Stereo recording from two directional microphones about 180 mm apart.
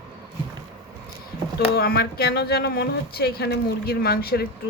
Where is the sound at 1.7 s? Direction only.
60° left (ahead or behind).